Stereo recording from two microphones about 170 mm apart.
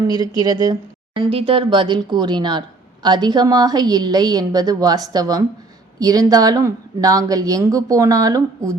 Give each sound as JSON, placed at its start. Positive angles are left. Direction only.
{"t": 0.1, "sound": "speech", "side_deg": -25}